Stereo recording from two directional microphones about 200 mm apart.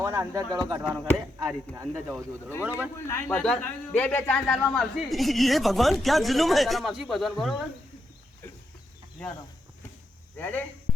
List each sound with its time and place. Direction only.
0.0 s speech: 15° right (ahead or behind)
3.1 s a man's voice: 10° left (ahead or behind)
10.3 s speech: 10° left (ahead or behind)